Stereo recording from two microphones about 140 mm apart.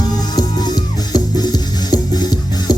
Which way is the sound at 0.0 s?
30° left (ahead or behind).